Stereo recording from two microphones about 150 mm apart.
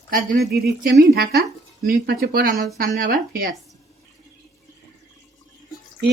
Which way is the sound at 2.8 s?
75° right (ahead or behind).